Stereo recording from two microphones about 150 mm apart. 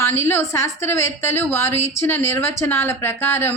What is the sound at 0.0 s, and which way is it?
A woman's voice, 15° left (ahead or behind).